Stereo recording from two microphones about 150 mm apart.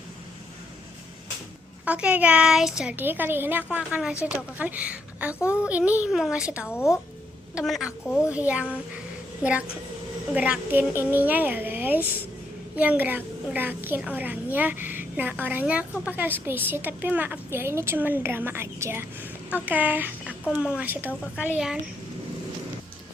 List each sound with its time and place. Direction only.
1.8 s a woman's voice: 10° right (ahead or behind)
6.7 s speech: 15° left (ahead or behind)
7.5 s a woman's voice: centre (ahead or behind)